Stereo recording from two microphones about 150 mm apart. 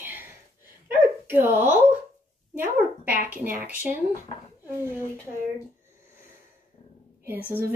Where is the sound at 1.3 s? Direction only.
15° right (ahead or behind).